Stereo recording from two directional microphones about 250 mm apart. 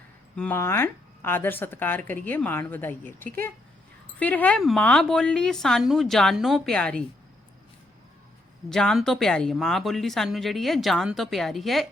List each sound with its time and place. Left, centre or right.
0.3 s speech: centre
8.7 s speech: centre